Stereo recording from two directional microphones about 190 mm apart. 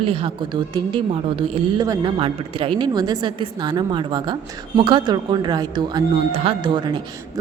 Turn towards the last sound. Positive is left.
turn(degrees=-25)  # may be behind; listen again after turning